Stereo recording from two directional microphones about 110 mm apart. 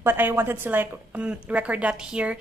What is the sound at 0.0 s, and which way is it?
A woman's voice, 20° right (ahead or behind).